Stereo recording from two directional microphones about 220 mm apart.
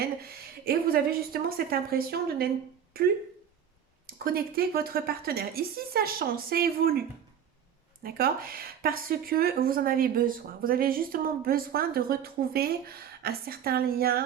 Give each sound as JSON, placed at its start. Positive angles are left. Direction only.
{"t": 0.0, "sound": "a woman's voice", "side_deg": -45}
{"t": 4.0, "sound": "a woman's voice", "side_deg": -40}
{"t": 8.0, "sound": "a woman's voice", "side_deg": -40}